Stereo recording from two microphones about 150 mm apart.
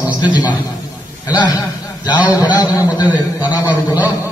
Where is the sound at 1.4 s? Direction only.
25° left (ahead or behind).